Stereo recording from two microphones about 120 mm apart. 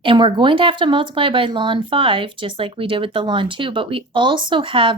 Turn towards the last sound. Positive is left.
turn(degrees=-45)  # may be behind; listen again after turning